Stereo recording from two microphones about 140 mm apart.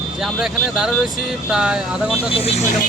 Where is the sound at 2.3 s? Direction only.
45° left (ahead or behind).